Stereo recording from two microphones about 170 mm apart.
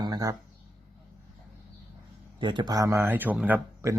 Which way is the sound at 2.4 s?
25° right (ahead or behind).